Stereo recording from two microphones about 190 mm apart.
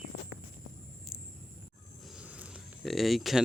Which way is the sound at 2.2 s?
5° right (ahead or behind).